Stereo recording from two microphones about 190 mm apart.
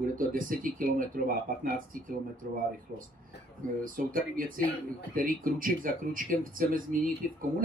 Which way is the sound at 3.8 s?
45° right (ahead or behind).